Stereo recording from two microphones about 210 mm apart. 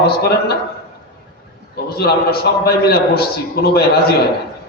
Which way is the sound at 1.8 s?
50° left (ahead or behind).